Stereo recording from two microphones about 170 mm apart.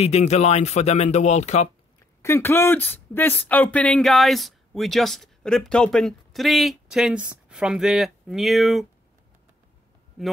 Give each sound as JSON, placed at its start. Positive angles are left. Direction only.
{"t": 0.0, "sound": "speech", "side_deg": 40}
{"t": 2.2, "sound": "speech", "side_deg": 15}